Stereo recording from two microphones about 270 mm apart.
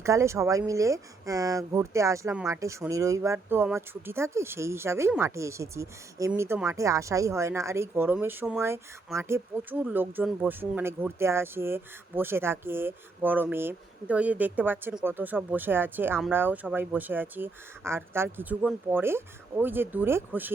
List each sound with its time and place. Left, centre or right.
0.0 s speech: centre